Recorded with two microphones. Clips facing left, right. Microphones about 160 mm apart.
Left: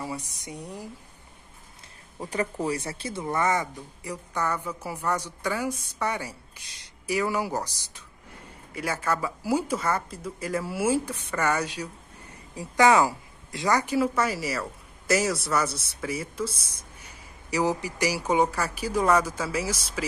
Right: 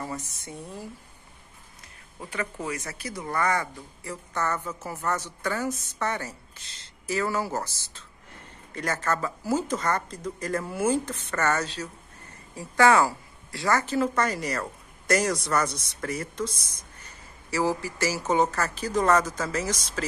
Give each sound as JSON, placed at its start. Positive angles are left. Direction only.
{"t": 0.0, "sound": "speech", "side_deg": 15}
{"t": 2.1, "sound": "speech", "side_deg": 35}